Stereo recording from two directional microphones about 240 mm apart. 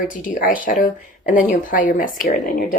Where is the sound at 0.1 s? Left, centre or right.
Left.